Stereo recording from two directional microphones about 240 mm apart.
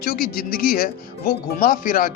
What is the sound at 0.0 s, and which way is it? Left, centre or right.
Speech, left.